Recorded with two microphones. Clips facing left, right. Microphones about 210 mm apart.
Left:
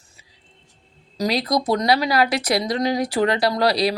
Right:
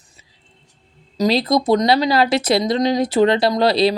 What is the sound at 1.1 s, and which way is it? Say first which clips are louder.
A woman's voice: right 5 dB; 25° right (ahead or behind).